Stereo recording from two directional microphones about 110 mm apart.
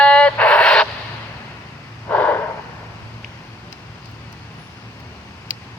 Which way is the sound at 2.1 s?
15° left (ahead or behind).